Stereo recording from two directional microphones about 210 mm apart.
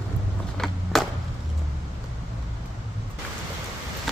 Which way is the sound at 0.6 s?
Centre (ahead or behind).